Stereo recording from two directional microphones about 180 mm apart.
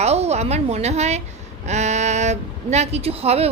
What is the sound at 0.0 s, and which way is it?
A woman's voice, 35° right (ahead or behind).